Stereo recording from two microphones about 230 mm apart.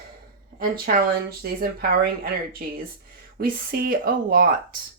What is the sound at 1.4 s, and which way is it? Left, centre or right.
Speech, right.